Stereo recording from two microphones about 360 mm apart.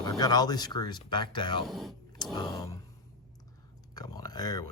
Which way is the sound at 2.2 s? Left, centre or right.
Centre.